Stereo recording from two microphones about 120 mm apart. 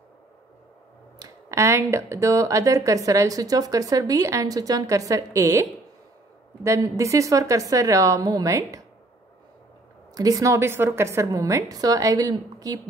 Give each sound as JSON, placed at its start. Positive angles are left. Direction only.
{"t": 1.2, "sound": "speech", "side_deg": -25}
{"t": 10.1, "sound": "speech", "side_deg": -30}